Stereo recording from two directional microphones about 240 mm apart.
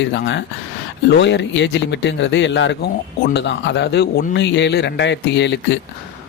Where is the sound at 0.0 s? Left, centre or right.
Left.